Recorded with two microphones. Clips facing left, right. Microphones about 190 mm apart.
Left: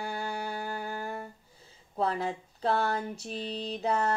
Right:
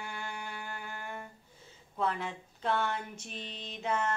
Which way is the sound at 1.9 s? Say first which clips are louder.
Left 4 dB; 35° left (ahead or behind).